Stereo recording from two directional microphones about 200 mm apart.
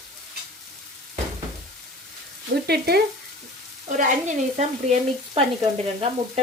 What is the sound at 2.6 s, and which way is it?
Stir, 55° right (ahead or behind).